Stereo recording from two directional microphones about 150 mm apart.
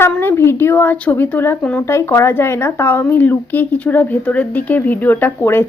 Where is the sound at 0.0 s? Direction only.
15° left (ahead or behind).